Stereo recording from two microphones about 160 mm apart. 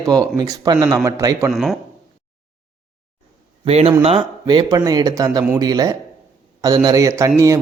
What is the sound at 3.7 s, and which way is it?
Speech, 40° right (ahead or behind).